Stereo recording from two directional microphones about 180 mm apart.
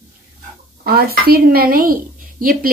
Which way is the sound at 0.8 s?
55° right (ahead or behind).